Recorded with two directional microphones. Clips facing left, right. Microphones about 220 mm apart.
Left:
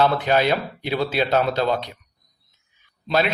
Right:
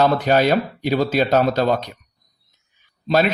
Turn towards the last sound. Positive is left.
turn(degrees=-45)  # may be behind; listen again after turning